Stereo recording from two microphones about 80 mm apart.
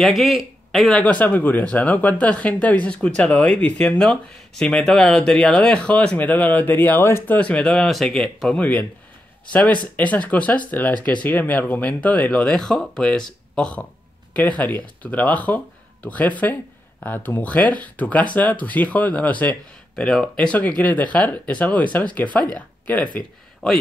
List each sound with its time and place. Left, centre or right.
0.0 s speech: centre
0.9 s speech: centre
7.3 s speech: centre
8.5 s speech: centre
20.0 s speech: centre
20.5 s speech: centre
23.6 s a man's voice: centre